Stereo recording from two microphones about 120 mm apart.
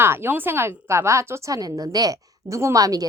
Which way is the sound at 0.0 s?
20° right (ahead or behind).